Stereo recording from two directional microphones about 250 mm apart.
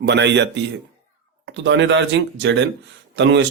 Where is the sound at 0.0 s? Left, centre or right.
Right.